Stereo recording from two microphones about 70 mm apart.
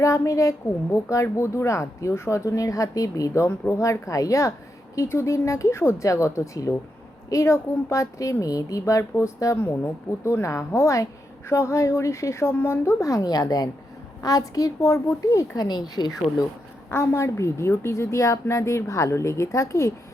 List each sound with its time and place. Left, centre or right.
0.0 s speech: left
8.8 s speech: left
13.0 s a woman's voice: left
16.0 s speech: left
16.9 s speech: left